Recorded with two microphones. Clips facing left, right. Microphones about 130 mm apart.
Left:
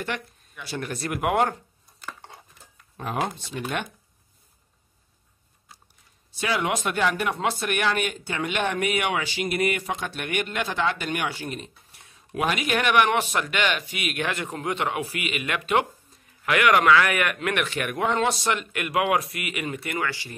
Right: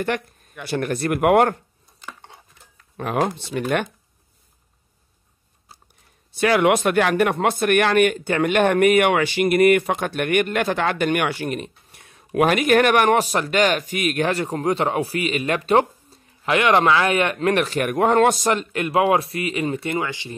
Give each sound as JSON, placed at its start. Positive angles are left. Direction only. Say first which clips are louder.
{"t": 0.0, "sound": "speech", "louder": "right 7 dB", "side_deg": -55}
{"t": 3.0, "sound": "speech", "louder": "right 6 dB", "side_deg": -70}
{"t": 6.4, "sound": "speech", "louder": "right 9 dB", "side_deg": -60}
{"t": 18.6, "sound": "speech", "louder": "right 6 dB", "side_deg": -30}